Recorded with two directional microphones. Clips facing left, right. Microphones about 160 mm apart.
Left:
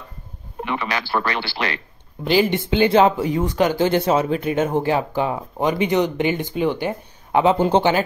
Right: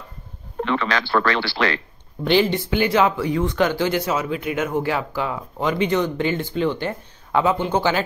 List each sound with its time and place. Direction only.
0.6 s speech: 10° left (ahead or behind)
3.4 s speech: 40° left (ahead or behind)
3.8 s speech: 25° left (ahead or behind)
7.5 s speech: 40° left (ahead or behind)